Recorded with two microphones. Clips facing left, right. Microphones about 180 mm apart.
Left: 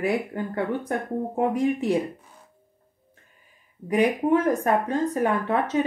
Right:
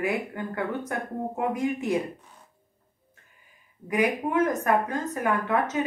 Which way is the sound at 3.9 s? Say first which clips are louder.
Left 4 dB; 30° left (ahead or behind).